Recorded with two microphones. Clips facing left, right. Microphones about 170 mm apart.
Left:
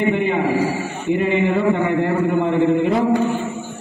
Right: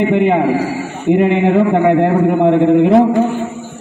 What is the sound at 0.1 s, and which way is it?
A man's voice, 70° right (ahead or behind).